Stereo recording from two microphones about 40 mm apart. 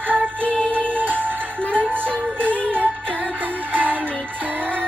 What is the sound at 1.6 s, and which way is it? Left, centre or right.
Music, left.